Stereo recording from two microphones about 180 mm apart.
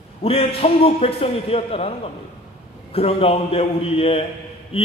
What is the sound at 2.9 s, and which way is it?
Speech, 30° left (ahead or behind).